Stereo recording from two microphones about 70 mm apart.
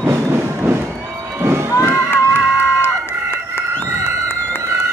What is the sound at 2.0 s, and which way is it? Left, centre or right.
Run, left.